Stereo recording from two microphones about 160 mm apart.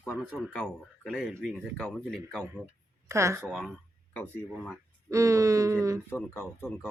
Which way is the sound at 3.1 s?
20° right (ahead or behind).